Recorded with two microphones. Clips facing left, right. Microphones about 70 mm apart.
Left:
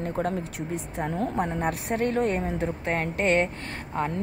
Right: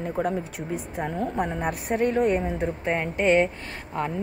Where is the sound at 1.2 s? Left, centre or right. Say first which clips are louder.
Left 1 dB; centre.